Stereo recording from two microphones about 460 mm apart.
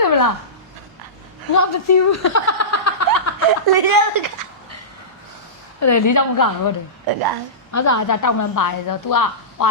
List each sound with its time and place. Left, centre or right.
0.0 s a sound: left
1.5 s chuckle: left
3.7 s speech: right
5.8 s a woman's voice: left
7.1 s speech: right
7.7 s a woman's voice: left